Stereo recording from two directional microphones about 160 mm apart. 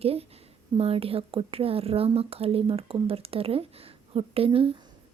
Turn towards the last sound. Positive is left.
turn(degrees=-35)  # may be behind; listen again after turning